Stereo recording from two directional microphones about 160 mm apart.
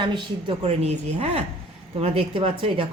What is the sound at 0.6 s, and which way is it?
A woman's voice, 40° right (ahead or behind).